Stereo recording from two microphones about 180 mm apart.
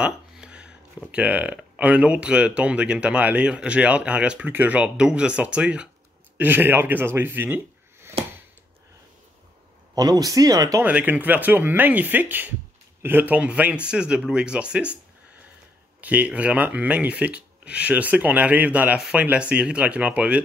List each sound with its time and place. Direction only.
0.0 s a sound: 5° right (ahead or behind)
1.1 s speech: 5° right (ahead or behind)
9.9 s speech: 20° right (ahead or behind)
10.9 s speech: 10° right (ahead or behind)
16.0 s speech: 10° right (ahead or behind)